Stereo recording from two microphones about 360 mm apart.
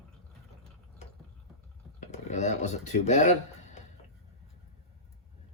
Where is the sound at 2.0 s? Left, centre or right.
Centre.